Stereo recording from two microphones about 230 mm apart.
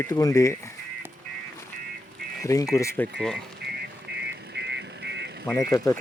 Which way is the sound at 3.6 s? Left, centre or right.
Right.